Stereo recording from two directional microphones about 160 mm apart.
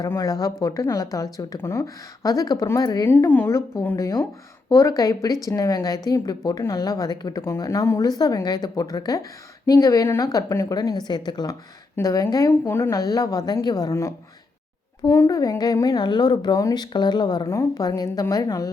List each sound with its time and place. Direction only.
0.0 s speech: 25° left (ahead or behind)
3.1 s speech: 15° left (ahead or behind)